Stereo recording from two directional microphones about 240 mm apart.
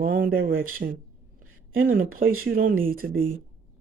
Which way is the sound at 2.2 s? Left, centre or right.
Right.